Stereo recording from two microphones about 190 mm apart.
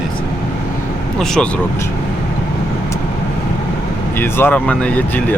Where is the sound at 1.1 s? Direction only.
5° left (ahead or behind).